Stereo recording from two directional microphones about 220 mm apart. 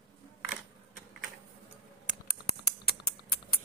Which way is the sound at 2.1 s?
45° left (ahead or behind).